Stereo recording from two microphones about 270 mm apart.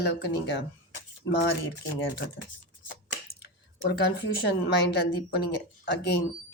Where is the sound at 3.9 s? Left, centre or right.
Left.